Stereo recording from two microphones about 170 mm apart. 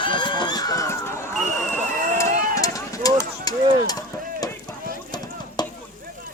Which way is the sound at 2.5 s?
20° left (ahead or behind).